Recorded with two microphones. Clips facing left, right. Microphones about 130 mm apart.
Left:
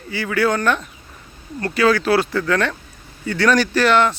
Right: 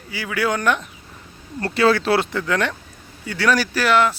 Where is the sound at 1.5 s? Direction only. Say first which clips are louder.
Even; 30° right (ahead or behind).